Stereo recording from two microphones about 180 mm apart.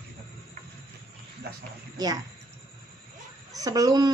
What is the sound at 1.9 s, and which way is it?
Speech, 20° right (ahead or behind).